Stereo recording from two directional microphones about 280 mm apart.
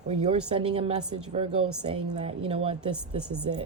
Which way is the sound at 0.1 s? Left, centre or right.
Right.